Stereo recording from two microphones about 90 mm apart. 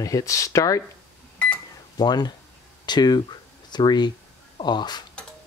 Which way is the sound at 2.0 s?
50° left (ahead or behind).